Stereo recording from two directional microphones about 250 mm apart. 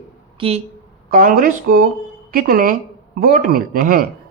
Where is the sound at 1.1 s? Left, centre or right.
Right.